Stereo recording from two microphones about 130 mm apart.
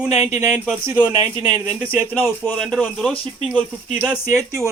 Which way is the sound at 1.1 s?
30° right (ahead or behind).